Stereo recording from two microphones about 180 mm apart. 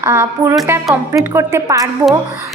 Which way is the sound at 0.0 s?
15° right (ahead or behind).